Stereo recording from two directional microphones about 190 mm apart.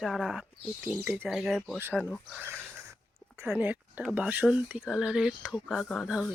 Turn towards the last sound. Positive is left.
turn(degrees=0)  # may be behind; listen again after turning